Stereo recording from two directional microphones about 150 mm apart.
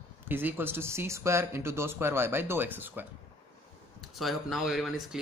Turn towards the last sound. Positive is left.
turn(degrees=0)  # may be behind; listen again after turning